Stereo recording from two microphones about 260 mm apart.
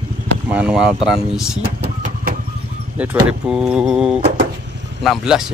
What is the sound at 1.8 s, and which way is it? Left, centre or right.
Vehicle, right.